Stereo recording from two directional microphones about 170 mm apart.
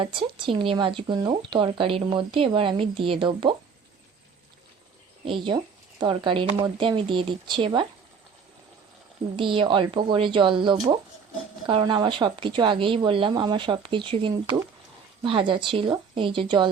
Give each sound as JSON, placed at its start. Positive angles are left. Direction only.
{"t": 0.0, "sound": "speech", "side_deg": -30}
{"t": 5.2, "sound": "speech", "side_deg": -30}
{"t": 9.3, "sound": "speech", "side_deg": -30}